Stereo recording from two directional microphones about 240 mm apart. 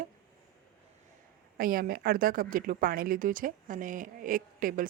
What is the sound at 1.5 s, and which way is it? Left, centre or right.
Speech, right.